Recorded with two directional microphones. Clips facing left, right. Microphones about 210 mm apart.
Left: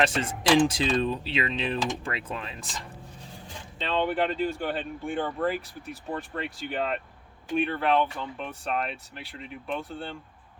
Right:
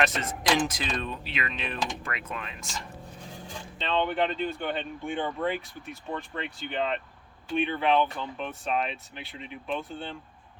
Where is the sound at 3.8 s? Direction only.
5° left (ahead or behind).